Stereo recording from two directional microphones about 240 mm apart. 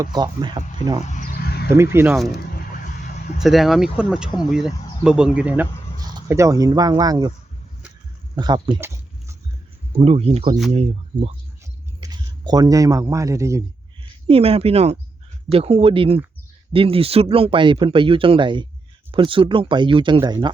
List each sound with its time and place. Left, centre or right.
0.0 s speech: centre
1.0 s a sound: left
1.7 s speech: centre
3.4 s speech: centre
8.4 s speech: centre
10.0 s speech: right